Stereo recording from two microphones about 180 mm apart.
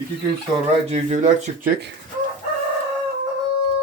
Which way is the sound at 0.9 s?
40° right (ahead or behind).